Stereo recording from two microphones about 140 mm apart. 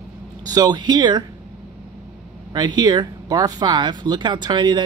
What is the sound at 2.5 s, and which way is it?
Speech, 30° right (ahead or behind).